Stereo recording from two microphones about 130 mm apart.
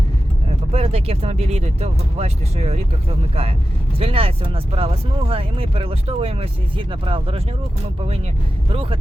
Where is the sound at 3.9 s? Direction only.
45° right (ahead or behind).